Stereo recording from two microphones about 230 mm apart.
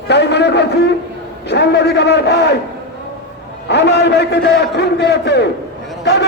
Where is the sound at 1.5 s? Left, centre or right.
Left.